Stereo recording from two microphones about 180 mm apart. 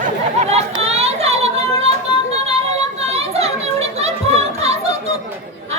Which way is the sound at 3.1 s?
35° right (ahead or behind).